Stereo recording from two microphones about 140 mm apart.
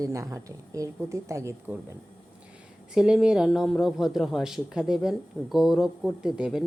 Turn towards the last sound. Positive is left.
turn(degrees=-5)  # may be behind; listen again after turning